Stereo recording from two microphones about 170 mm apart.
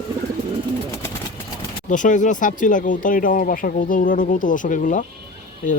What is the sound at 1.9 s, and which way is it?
Speech, 50° left (ahead or behind).